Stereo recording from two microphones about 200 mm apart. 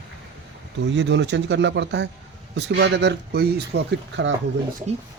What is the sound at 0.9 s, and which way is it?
Speech, 65° right (ahead or behind).